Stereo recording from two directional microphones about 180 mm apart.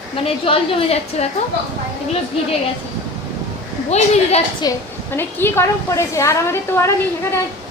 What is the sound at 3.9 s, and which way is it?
Speech, 35° left (ahead or behind).